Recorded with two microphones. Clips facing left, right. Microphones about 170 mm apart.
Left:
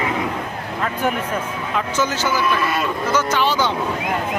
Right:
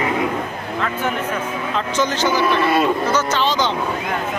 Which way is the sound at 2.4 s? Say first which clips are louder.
Right 4 dB; 30° right (ahead or behind).